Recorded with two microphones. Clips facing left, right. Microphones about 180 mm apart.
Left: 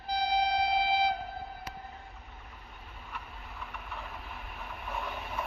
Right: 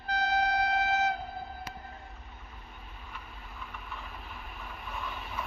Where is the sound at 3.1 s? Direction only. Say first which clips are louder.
Left 4 dB; 70° left (ahead or behind).